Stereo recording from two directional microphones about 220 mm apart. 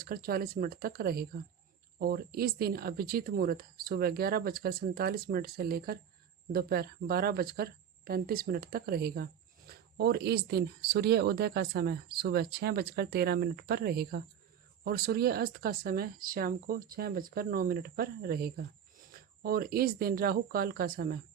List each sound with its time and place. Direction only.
0.0 s speech: 40° right (ahead or behind)